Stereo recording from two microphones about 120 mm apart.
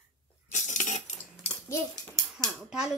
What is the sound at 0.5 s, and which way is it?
Cutlery, 90° left.